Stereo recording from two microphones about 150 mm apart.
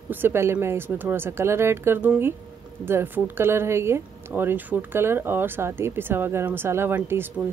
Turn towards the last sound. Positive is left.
turn(degrees=-15)  # may be behind; listen again after turning